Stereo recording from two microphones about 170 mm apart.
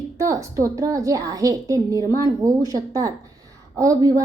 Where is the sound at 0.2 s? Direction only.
20° right (ahead or behind).